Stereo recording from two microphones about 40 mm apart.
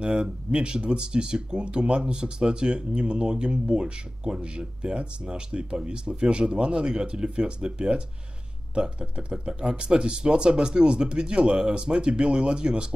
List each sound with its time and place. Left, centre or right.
0.0 s speech: right
6.8 s speech: centre